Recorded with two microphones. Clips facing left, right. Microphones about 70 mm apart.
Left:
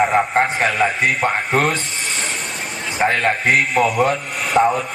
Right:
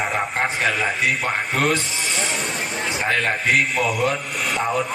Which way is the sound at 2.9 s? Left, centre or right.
Left.